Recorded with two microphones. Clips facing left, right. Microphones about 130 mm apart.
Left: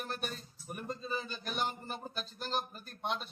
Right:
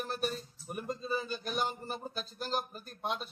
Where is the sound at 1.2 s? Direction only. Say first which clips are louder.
Right 4 dB; 5° right (ahead or behind).